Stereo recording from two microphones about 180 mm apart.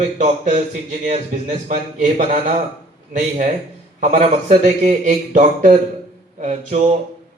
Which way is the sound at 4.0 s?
45° right (ahead or behind).